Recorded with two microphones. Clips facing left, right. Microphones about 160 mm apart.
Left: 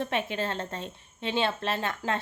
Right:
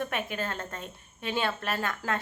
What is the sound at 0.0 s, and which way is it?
A woman's voice, 25° left (ahead or behind).